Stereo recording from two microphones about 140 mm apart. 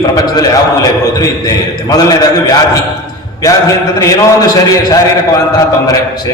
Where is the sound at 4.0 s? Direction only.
25° left (ahead or behind).